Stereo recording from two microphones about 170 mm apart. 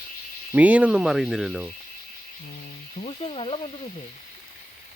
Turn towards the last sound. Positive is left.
turn(degrees=35)  # may be behind; listen again after turning